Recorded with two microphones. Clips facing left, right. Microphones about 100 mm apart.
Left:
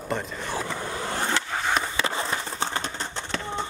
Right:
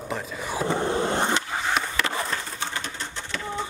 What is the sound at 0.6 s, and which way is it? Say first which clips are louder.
Skateboard: right 7 dB; 30° right (ahead or behind).